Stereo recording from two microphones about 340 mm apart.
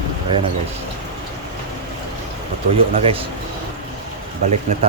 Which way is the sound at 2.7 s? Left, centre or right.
Centre.